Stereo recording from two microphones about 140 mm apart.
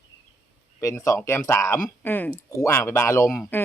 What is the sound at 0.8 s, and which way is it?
Speech, 20° left (ahead or behind).